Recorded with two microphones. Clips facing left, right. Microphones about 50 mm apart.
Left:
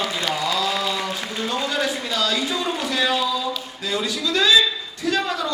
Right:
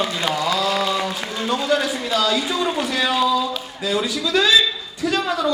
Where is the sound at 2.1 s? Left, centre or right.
Centre.